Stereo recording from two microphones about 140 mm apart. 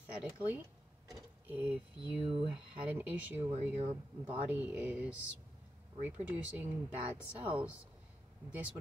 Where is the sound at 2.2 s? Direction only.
40° right (ahead or behind).